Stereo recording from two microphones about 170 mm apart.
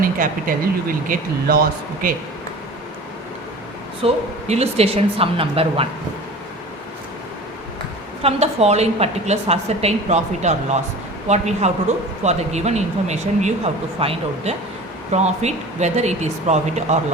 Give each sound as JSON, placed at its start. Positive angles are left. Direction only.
{"t": 0.0, "sound": "speech", "side_deg": -55}
{"t": 4.0, "sound": "a woman's voice", "side_deg": -40}
{"t": 8.2, "sound": "a woman's voice", "side_deg": -35}